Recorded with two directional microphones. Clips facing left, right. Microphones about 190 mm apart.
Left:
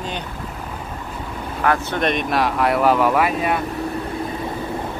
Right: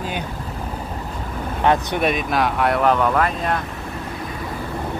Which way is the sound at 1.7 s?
15° right (ahead or behind).